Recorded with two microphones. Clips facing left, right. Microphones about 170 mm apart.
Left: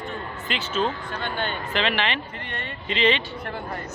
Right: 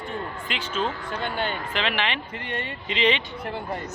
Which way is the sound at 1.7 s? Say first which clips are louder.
Left 2 dB; 10° right (ahead or behind).